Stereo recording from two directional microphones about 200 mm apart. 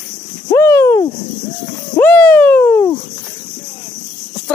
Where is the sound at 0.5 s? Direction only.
15° left (ahead or behind).